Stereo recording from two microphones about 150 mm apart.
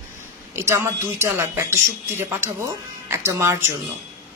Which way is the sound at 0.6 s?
20° right (ahead or behind).